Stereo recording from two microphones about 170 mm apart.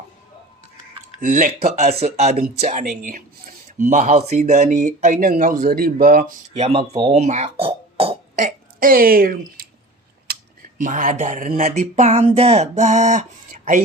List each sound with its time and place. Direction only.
1.2 s speech: 50° right (ahead or behind)
2.0 s speech: 40° right (ahead or behind); by 6.3 s 60° right (ahead or behind)
6.6 s speech: 35° right (ahead or behind)
8.4 s speech: 55° right (ahead or behind)